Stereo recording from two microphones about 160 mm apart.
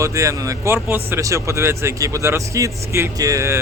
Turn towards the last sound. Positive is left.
turn(degrees=-15)  # may be behind; listen again after turning